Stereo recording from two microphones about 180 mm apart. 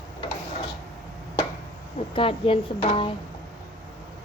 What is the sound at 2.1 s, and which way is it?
Speech, 30° left (ahead or behind).